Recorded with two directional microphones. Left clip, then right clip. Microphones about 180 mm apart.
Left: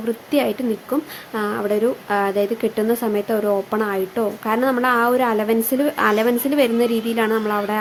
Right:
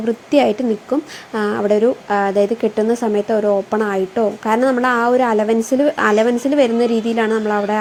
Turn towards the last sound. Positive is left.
turn(degrees=-10)  # may be behind; listen again after turning